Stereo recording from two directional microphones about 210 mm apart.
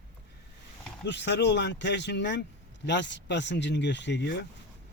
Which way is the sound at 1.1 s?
55° left (ahead or behind).